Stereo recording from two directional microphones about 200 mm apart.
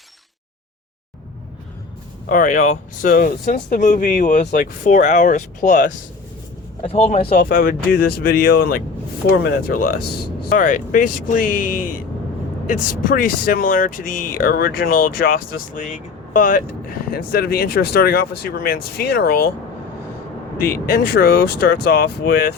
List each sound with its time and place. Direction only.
2.3 s speech: 40° left (ahead or behind)
7.3 s speech: 45° left (ahead or behind)
20.9 s speech: 50° left (ahead or behind)